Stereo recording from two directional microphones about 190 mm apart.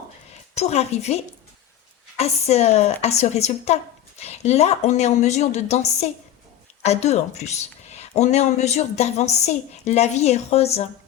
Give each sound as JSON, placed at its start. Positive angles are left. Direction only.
{"t": 0.3, "sound": "a woman's voice", "side_deg": 35}